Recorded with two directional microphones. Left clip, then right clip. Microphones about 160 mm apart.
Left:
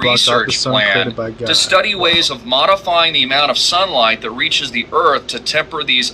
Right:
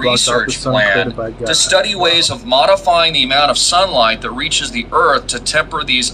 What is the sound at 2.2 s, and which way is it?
Speech, 50° right (ahead or behind).